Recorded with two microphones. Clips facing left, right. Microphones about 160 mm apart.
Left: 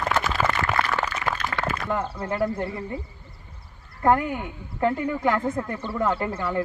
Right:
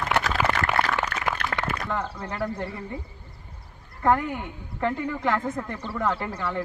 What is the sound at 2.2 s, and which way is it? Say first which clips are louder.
Speech: left 4 dB; 15° left (ahead or behind).